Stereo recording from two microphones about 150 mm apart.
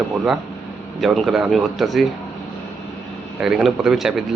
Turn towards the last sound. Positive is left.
turn(degrees=-5)  # may be behind; listen again after turning